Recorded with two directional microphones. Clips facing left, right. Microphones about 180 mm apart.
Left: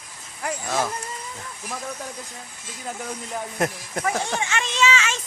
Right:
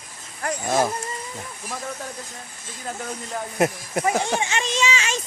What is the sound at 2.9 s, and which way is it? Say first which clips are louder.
Speech: right 1 dB; 5° left (ahead or behind).